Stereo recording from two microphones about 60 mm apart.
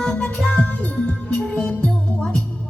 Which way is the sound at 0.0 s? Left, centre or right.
Centre.